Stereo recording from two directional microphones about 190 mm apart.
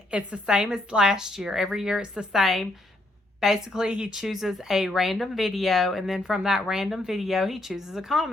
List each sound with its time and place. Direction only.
0.1 s a woman's voice: 5° right (ahead or behind)